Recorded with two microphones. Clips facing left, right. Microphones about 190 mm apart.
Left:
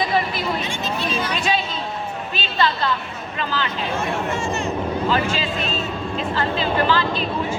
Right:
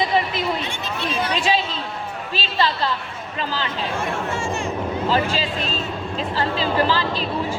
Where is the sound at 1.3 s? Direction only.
30° right (ahead or behind).